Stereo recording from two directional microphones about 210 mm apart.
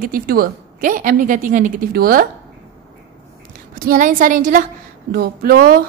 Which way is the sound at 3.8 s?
40° right (ahead or behind).